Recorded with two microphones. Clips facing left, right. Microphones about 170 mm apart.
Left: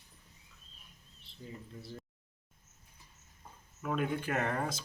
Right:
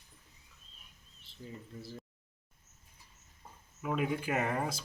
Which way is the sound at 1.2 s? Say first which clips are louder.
Right 1 dB; centre (ahead or behind).